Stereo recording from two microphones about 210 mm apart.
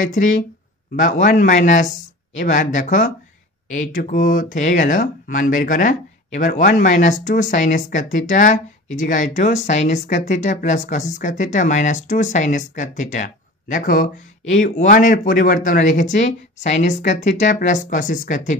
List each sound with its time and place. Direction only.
0.0 s speech: 35° left (ahead or behind)